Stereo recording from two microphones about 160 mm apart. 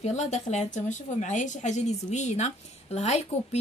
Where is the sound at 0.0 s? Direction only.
45° left (ahead or behind).